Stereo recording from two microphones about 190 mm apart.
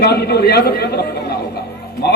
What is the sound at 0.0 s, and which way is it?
A man's voice, 55° left (ahead or behind).